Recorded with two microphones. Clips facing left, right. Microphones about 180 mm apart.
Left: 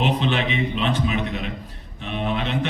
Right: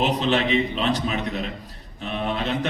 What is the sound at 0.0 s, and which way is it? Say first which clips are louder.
Speech: right 1 dB; 40° right (ahead or behind).